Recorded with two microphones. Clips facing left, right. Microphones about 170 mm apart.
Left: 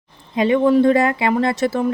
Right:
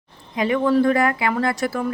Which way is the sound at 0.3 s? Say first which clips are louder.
Left 4 dB; 25° left (ahead or behind).